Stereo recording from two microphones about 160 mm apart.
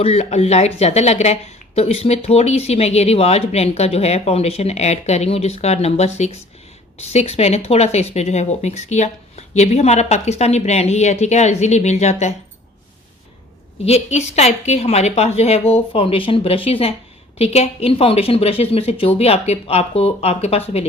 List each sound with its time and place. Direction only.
0.0 s a woman's voice: 40° left (ahead or behind)
13.8 s a woman's voice: 40° left (ahead or behind)